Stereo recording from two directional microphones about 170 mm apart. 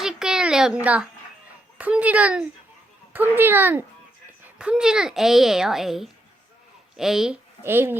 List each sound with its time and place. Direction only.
0.0 s a sound: 5° right (ahead or behind)
1.8 s a child's voice: 10° right (ahead or behind)
7.6 s a child's voice: 15° right (ahead or behind)